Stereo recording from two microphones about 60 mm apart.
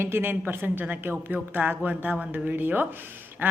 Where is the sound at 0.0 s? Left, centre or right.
Right.